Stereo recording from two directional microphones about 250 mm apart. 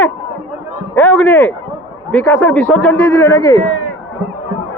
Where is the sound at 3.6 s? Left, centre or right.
Left.